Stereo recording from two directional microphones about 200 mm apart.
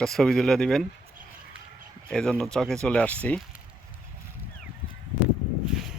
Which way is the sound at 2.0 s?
Centre (ahead or behind).